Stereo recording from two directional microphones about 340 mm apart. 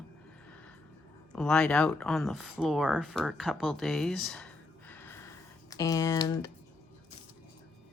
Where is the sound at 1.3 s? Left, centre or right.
Centre.